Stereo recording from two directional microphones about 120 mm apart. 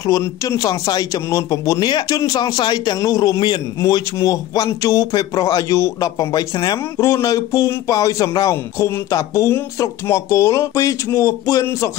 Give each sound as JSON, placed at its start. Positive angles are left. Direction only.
{"t": 0.0, "sound": "a man's voice", "side_deg": 25}